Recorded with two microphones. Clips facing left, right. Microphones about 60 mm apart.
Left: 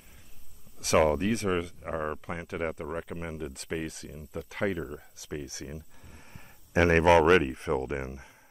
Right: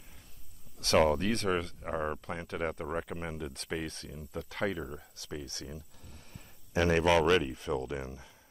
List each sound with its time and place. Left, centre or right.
0.7 s speech: centre
6.3 s a sound: left
7.1 s speech: left